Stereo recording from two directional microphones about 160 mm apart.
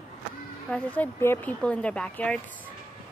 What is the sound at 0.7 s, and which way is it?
Speech, 10° left (ahead or behind).